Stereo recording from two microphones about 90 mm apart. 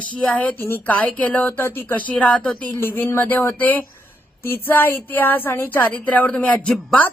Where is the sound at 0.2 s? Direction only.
10° left (ahead or behind).